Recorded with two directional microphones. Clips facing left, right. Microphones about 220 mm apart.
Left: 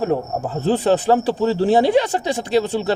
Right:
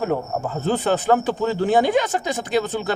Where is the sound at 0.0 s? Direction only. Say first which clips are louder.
Left 2 dB; 30° left (ahead or behind).